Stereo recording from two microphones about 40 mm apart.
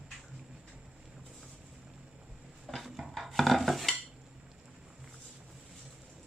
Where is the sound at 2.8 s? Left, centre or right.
Centre.